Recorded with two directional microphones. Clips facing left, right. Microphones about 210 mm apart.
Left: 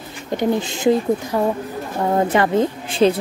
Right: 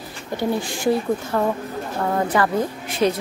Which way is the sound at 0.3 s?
20° left (ahead or behind).